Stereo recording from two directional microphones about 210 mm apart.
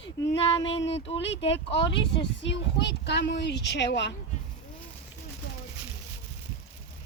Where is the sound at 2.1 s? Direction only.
55° left (ahead or behind).